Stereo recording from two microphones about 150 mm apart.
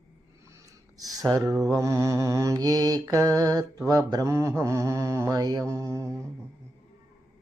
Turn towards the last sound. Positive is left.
turn(degrees=-20)  # may be behind; listen again after turning